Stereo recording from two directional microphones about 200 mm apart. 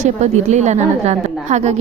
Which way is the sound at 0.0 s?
35° right (ahead or behind).